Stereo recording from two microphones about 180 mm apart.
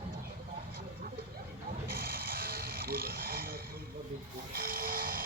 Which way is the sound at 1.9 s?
55° right (ahead or behind).